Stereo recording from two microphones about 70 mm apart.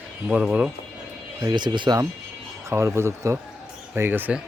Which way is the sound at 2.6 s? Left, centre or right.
Right.